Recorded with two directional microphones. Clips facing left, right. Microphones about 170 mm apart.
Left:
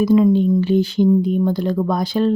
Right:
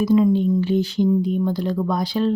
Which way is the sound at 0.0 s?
70° left (ahead or behind).